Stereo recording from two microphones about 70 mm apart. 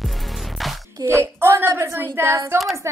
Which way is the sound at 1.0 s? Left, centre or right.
Right.